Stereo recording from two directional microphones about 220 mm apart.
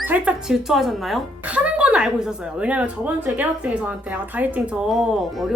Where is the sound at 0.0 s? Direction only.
5° right (ahead or behind).